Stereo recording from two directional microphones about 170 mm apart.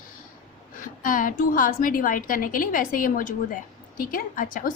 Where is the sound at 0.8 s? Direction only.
50° left (ahead or behind).